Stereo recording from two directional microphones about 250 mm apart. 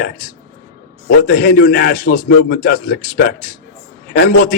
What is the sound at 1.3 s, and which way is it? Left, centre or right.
A man's voice, left.